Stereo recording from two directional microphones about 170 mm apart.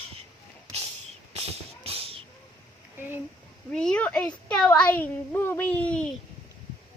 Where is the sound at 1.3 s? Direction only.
35° right (ahead or behind).